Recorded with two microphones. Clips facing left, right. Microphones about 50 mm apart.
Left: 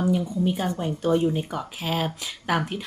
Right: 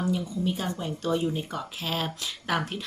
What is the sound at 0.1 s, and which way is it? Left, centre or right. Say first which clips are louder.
A woman's voice: left 4 dB; left.